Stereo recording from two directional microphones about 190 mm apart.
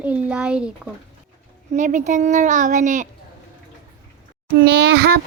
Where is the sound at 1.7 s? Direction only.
40° right (ahead or behind).